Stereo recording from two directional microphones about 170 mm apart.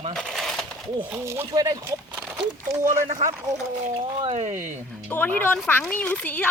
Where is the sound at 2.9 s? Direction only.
45° right (ahead or behind).